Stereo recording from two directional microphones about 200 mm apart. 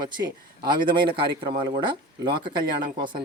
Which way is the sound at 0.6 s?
25° right (ahead or behind).